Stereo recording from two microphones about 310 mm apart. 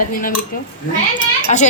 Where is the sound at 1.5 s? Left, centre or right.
Left.